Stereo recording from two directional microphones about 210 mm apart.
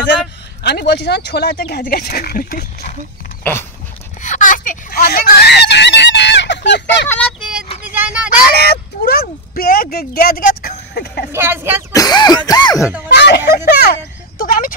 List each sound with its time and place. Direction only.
0.7 s speech: 55° left (ahead or behind); by 3.0 s 40° left (ahead or behind)
4.2 s speech: 40° left (ahead or behind); by 7.1 s 55° left (ahead or behind)
7.1 s a sound: 5° left (ahead or behind)
8.5 s speech: 50° left (ahead or behind)
11.3 s speech: 10° right (ahead or behind)
11.9 s cough: 15° left (ahead or behind)
13.1 s speech: 50° left (ahead or behind)
14.4 s a sound: 40° left (ahead or behind)